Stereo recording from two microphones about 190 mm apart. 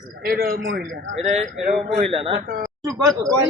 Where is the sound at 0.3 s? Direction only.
50° right (ahead or behind).